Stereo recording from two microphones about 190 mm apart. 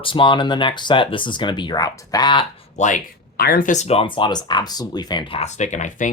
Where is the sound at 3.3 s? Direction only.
55° left (ahead or behind).